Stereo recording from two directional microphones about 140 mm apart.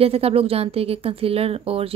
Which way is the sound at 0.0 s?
45° right (ahead or behind).